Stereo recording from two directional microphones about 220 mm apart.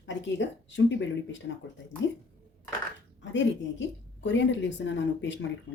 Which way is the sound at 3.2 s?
55° left (ahead or behind).